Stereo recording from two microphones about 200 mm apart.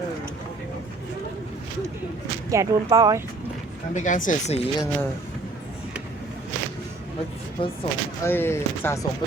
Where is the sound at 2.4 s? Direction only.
15° right (ahead or behind).